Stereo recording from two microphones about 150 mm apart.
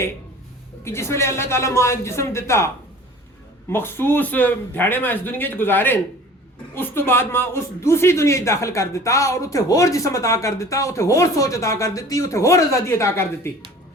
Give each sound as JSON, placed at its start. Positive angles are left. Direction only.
{"t": 0.9, "sound": "speech", "side_deg": 15}
{"t": 3.7, "sound": "speech", "side_deg": 15}